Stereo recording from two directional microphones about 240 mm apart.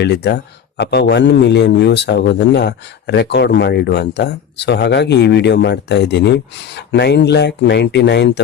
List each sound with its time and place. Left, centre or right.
0.0 s a man's voice: left